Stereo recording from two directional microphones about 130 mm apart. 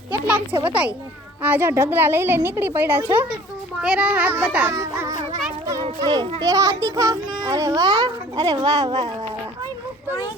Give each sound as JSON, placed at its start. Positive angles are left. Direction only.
{"t": 0.1, "sound": "a woman's voice", "side_deg": -15}
{"t": 4.7, "sound": "a child's voice", "side_deg": -25}
{"t": 6.4, "sound": "a child's voice", "side_deg": -25}